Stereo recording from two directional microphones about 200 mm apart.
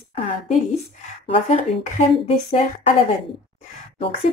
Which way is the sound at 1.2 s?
35° left (ahead or behind).